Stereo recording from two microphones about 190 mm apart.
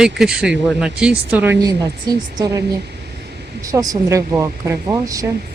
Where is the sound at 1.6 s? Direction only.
20° right (ahead or behind).